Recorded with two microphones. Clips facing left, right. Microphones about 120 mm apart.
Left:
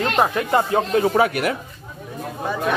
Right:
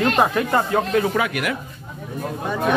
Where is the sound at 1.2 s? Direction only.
35° left (ahead or behind).